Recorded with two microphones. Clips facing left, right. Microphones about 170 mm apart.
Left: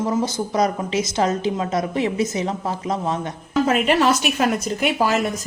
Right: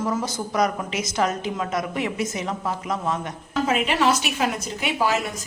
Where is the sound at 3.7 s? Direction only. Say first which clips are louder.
Left 3 dB; 45° left (ahead or behind).